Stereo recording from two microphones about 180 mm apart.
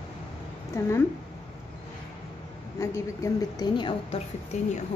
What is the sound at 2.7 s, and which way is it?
A woman's voice, 15° left (ahead or behind).